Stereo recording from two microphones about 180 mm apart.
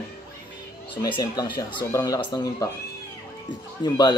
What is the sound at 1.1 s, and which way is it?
Speech, 25° left (ahead or behind).